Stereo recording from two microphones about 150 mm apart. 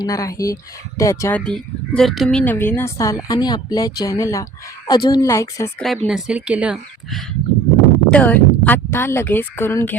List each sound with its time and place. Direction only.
0.0 s speech: 20° left (ahead or behind)
1.5 s speech: 5° left (ahead or behind)
2.4 s speech: 10° left (ahead or behind)
5.8 s speech: centre (ahead or behind)
8.1 s speech: 10° left (ahead or behind)